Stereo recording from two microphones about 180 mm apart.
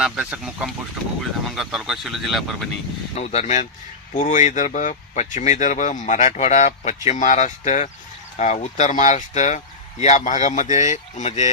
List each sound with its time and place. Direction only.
0.0 s speech: 5° right (ahead or behind)
3.2 s speech: 40° left (ahead or behind)